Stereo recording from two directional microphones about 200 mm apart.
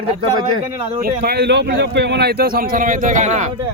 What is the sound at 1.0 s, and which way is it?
A man's voice, 50° right (ahead or behind).